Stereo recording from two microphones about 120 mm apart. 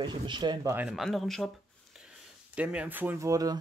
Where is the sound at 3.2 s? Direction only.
30° right (ahead or behind).